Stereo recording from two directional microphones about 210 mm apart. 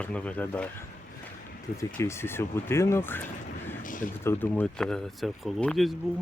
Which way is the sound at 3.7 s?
40° left (ahead or behind).